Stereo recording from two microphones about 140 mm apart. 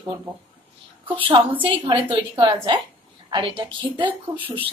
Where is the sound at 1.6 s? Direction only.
40° right (ahead or behind).